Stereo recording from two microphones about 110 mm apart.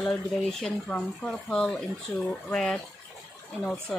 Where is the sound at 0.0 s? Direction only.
5° left (ahead or behind).